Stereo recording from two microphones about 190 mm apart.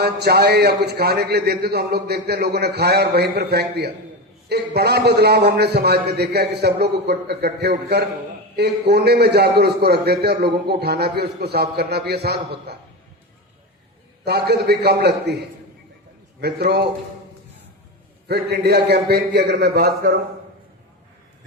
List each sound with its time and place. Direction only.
0.0 s a man's voice: 60° right (ahead or behind)
14.3 s a man's voice: 60° right (ahead or behind)
16.4 s a man's voice: 55° right (ahead or behind)
18.3 s a man's voice: 60° right (ahead or behind)